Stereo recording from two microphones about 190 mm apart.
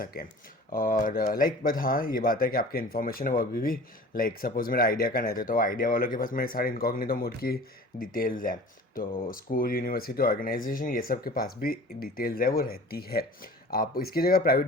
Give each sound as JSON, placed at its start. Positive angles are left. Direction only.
{"t": 0.0, "sound": "speech", "side_deg": 50}